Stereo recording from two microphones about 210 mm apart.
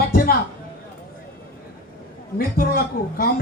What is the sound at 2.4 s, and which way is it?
Speech, 45° left (ahead or behind).